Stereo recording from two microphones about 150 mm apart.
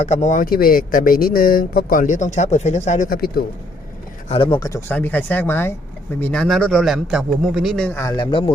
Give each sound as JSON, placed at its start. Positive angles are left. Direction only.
{"t": 0.0, "sound": "speech", "side_deg": 50}
{"t": 0.5, "sound": "speech", "side_deg": 75}
{"t": 4.3, "sound": "speech", "side_deg": 35}
{"t": 4.9, "sound": "a man's voice", "side_deg": 10}
{"t": 7.9, "sound": "speech", "side_deg": 20}